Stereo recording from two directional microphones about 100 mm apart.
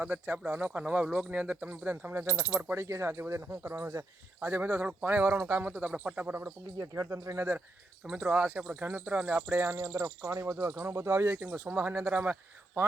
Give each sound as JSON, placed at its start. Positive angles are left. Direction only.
{"t": 0.0, "sound": "speech", "side_deg": -15}
{"t": 6.7, "sound": "speech", "side_deg": -30}